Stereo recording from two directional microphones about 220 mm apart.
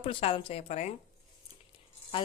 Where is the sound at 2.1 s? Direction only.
20° left (ahead or behind).